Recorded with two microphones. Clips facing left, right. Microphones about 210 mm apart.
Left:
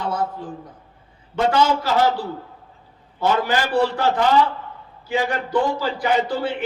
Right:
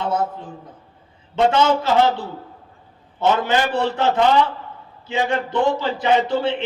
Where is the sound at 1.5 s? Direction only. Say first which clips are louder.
Right 1 dB; 25° right (ahead or behind).